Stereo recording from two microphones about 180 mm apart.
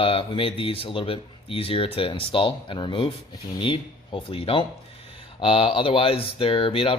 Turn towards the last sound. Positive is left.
turn(degrees=30)  # may be behind; listen again after turning